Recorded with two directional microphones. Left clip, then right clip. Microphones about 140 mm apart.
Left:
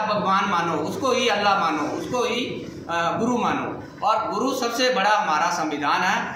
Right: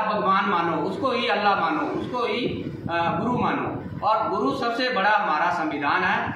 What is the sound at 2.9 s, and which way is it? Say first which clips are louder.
A man's voice: left 1 dB; 35° left (ahead or behind).